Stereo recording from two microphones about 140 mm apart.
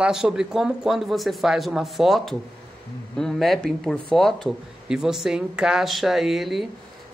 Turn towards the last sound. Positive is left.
turn(degrees=0)  # may be behind; listen again after turning